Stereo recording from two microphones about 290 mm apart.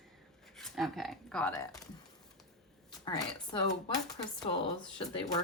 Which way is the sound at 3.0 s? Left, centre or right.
Centre.